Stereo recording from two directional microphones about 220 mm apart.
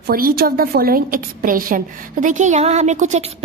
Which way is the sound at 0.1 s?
40° right (ahead or behind).